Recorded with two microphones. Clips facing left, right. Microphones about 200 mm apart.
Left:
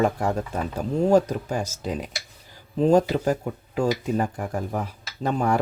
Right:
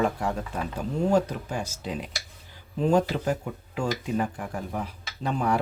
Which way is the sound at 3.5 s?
45° left (ahead or behind).